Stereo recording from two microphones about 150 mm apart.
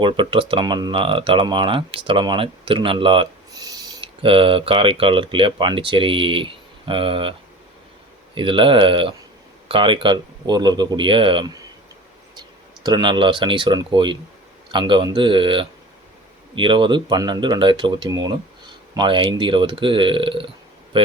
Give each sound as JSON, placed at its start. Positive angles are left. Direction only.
{"t": 0.0, "sound": "speech", "side_deg": -35}
{"t": 8.4, "sound": "speech", "side_deg": -35}